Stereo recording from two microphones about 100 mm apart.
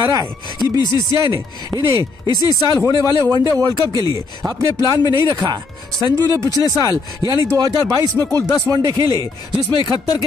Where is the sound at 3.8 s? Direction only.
40° right (ahead or behind).